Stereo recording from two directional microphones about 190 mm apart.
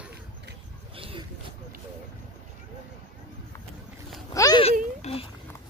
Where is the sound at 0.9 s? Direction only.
30° right (ahead or behind).